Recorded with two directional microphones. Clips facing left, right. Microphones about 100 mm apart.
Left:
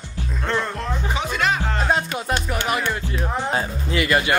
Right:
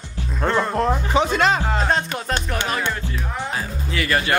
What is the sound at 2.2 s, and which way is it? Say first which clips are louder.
Music: even; 10° left (ahead or behind).